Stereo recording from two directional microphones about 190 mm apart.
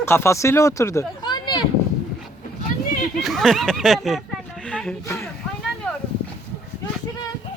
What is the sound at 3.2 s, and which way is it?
Speech, centre (ahead or behind).